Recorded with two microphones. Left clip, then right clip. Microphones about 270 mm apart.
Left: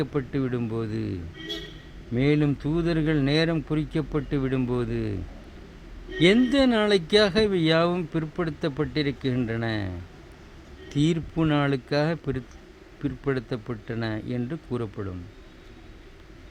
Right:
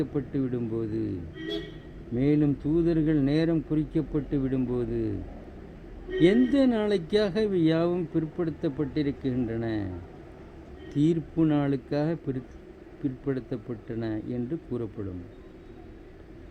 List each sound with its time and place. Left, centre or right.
0.0 s speech: left
2.1 s speech: left
6.1 s a man's voice: left